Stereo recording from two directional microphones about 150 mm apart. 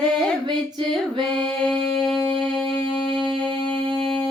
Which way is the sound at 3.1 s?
35° right (ahead or behind).